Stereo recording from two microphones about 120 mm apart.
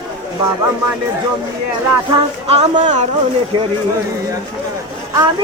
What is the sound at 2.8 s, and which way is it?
Speech, 80° right.